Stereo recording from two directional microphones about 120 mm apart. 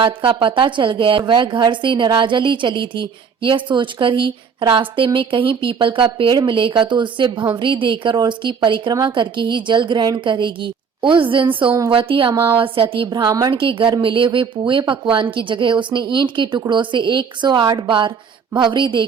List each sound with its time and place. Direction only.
0.0 s a woman's voice: 45° right (ahead or behind)
12.3 s speech: 20° right (ahead or behind)
12.5 s a woman's voice: 45° right (ahead or behind)
13.5 s a woman's voice: 45° right (ahead or behind)